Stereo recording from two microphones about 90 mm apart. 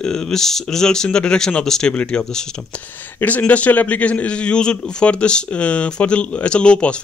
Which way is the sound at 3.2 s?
20° left (ahead or behind).